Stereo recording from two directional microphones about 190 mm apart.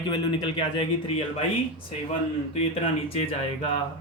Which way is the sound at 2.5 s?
30° left (ahead or behind).